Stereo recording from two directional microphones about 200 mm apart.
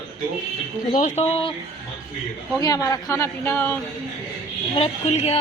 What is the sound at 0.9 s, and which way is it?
Speech, 35° left (ahead or behind).